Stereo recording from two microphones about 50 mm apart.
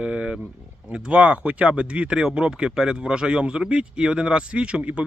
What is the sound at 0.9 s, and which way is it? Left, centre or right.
Speech, right.